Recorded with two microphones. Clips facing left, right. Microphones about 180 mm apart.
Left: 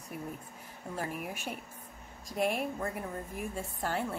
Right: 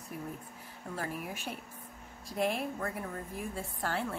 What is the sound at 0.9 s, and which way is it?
Speech, 15° left (ahead or behind).